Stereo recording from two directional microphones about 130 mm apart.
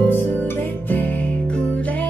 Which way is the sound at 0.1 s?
15° left (ahead or behind).